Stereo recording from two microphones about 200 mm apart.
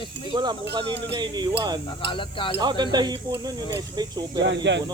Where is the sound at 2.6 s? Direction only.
20° right (ahead or behind).